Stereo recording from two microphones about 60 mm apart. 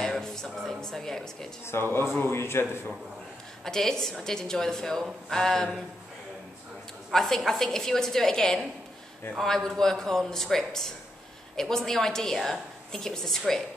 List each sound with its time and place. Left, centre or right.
0.0 s speech: centre
1.7 s a man's voice: left
3.6 s a woman's voice: centre
7.1 s a woman's voice: centre